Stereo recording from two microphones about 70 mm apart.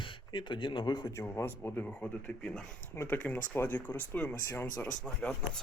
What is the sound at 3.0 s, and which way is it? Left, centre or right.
Speech, left.